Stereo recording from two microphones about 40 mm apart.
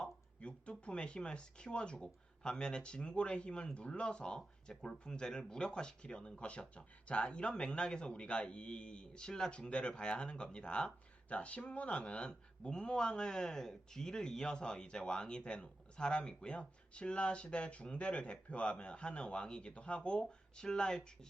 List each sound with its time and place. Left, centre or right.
0.0 s speech: left